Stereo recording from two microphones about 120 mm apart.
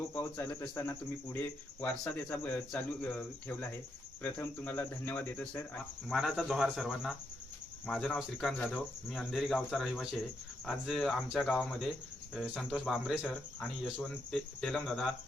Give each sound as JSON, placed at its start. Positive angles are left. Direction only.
{"t": 0.1, "sound": "speech", "side_deg": 15}
{"t": 6.1, "sound": "speech", "side_deg": 0}
{"t": 7.9, "sound": "speech", "side_deg": 10}